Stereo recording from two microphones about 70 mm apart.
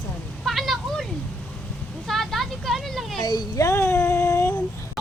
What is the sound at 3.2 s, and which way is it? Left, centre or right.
Speech, left.